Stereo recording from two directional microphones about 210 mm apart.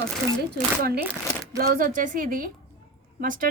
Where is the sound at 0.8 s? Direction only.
50° right (ahead or behind).